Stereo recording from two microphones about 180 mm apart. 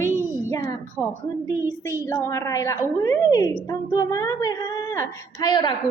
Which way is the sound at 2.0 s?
15° left (ahead or behind).